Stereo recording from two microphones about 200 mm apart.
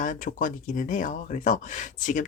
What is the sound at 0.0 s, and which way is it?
Speech, 40° left (ahead or behind).